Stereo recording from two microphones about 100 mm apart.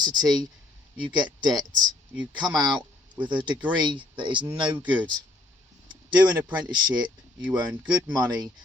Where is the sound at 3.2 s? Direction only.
15° right (ahead or behind).